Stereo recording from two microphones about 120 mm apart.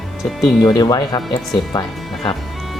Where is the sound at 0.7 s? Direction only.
30° left (ahead or behind).